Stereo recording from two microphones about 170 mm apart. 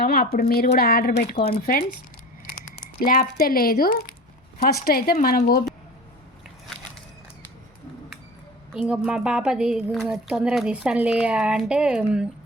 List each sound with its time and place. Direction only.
0.0 s a woman's voice: 65° left (ahead or behind)
3.0 s a woman's voice: 60° left (ahead or behind)
8.7 s speech: 5° right (ahead or behind)